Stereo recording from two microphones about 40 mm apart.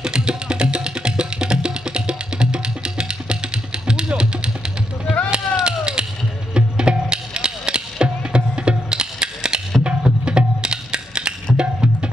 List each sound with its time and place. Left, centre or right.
0.0 s music: right
5.3 s a sound: right
6.5 s music: right